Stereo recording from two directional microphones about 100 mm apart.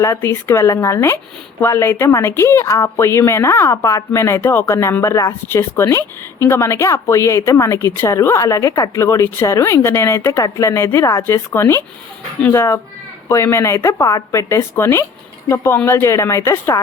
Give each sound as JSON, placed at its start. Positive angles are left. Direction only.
{"t": 0.0, "sound": "speech", "side_deg": 25}